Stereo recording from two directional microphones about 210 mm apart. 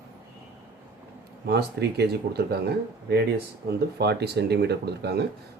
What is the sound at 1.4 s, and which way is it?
Speech, 50° right (ahead or behind).